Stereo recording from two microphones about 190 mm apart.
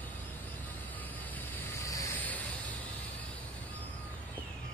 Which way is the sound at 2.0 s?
10° left (ahead or behind).